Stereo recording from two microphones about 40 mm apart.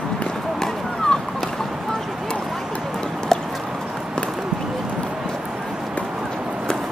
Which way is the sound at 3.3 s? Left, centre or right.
Centre.